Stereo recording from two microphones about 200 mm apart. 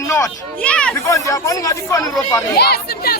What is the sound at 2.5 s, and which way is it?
Speech, 50° left (ahead or behind).